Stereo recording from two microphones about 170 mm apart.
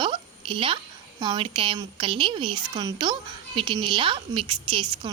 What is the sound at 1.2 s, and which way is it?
A woman's voice, 30° right (ahead or behind).